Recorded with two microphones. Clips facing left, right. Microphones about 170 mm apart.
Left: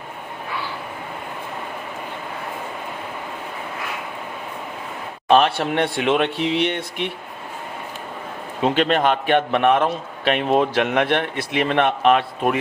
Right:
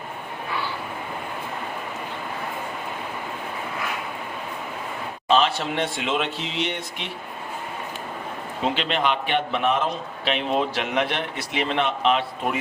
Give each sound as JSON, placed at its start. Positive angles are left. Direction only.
{"t": 5.3, "sound": "a man's voice", "side_deg": 60}
{"t": 8.7, "sound": "a man's voice", "side_deg": 50}